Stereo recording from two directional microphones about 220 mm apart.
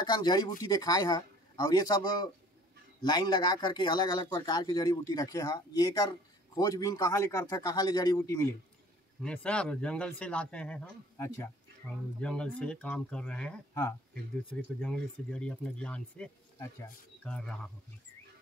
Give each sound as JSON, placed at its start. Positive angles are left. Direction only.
{"t": 0.0, "sound": "speech", "side_deg": 20}